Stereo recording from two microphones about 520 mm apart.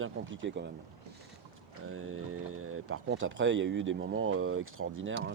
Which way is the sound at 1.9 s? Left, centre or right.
Right.